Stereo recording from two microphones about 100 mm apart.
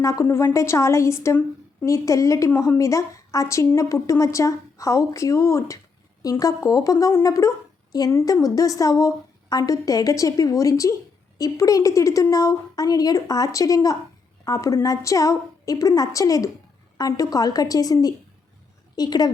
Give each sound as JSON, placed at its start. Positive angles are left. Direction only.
{"t": 0.0, "sound": "a woman's voice", "side_deg": 30}